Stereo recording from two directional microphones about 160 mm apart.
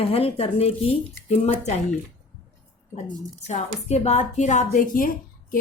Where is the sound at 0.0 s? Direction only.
35° left (ahead or behind).